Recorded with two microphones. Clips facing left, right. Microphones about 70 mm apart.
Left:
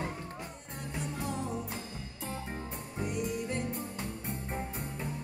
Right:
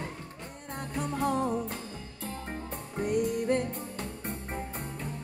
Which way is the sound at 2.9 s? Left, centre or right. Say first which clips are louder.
Right 6 dB; right.